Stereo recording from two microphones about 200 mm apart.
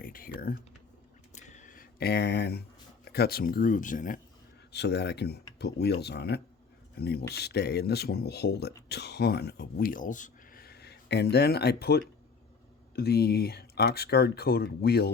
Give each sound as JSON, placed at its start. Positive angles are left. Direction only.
{"t": 0.0, "sound": "speech", "side_deg": 45}
{"t": 1.3, "sound": "a sound", "side_deg": 35}
{"t": 4.7, "sound": "speech", "side_deg": 55}